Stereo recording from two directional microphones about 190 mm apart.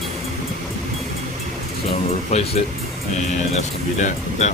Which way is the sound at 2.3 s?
35° left (ahead or behind).